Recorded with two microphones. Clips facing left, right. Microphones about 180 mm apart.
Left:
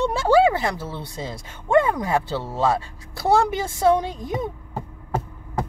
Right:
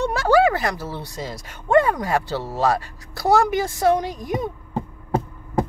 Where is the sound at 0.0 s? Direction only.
25° left (ahead or behind).